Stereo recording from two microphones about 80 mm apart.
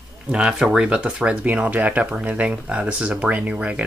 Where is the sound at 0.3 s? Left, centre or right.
Centre.